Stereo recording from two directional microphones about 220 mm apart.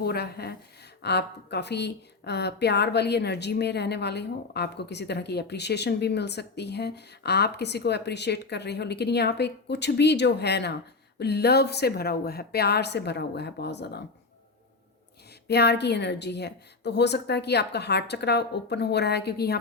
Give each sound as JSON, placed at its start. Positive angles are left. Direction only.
{"t": 0.0, "sound": "a woman's voice", "side_deg": 45}
{"t": 15.4, "sound": "a woman's voice", "side_deg": 50}